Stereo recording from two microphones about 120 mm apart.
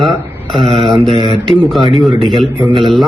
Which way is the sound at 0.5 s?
55° right (ahead or behind).